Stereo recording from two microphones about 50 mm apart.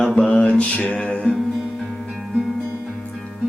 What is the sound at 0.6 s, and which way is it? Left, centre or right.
Music, left.